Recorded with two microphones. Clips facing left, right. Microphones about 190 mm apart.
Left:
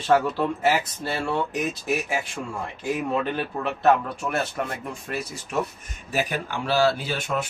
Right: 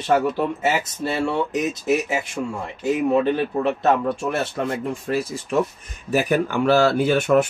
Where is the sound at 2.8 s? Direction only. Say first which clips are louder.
Right 7 dB; 20° right (ahead or behind).